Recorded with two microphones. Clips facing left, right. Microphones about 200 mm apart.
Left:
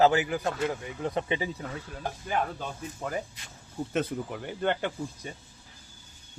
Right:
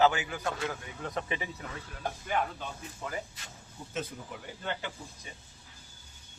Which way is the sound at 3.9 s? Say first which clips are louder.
Left 7 dB; 60° left (ahead or behind).